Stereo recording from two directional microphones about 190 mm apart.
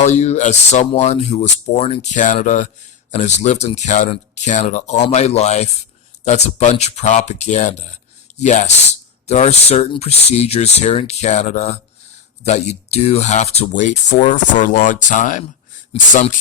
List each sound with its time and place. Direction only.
0.0 s speech: 35° left (ahead or behind)